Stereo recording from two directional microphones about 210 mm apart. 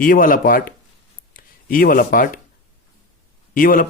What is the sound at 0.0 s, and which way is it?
Speech, 40° left (ahead or behind).